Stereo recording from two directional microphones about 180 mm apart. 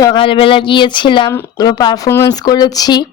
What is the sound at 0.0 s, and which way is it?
Speech, 25° left (ahead or behind).